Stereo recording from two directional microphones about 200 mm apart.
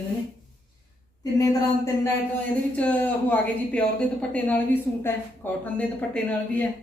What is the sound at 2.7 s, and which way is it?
Speech, 5° left (ahead or behind).